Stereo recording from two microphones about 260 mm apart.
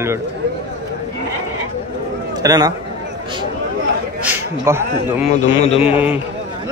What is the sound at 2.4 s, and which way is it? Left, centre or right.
Speech, centre.